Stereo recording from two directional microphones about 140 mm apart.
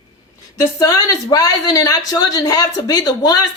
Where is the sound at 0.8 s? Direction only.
25° left (ahead or behind).